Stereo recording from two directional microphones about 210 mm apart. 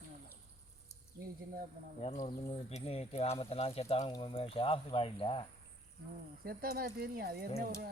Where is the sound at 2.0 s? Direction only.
30° left (ahead or behind).